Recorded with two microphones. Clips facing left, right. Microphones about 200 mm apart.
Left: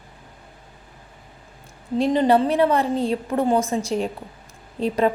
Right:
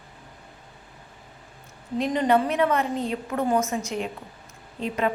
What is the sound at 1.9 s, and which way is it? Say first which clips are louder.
A woman's voice: left 4 dB; 30° left (ahead or behind).